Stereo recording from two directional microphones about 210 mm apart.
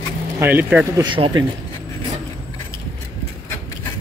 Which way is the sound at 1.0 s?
20° right (ahead or behind).